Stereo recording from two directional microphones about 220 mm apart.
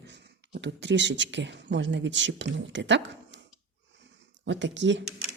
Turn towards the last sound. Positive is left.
turn(degrees=-55)  # may be behind; listen again after turning